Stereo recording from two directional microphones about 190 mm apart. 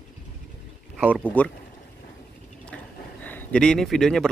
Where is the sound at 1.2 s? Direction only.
5° left (ahead or behind).